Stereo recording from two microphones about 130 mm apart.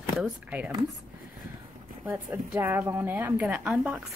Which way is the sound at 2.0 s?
15° right (ahead or behind).